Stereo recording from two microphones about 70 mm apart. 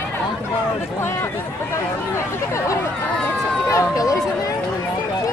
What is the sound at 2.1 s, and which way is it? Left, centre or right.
Chatter, left.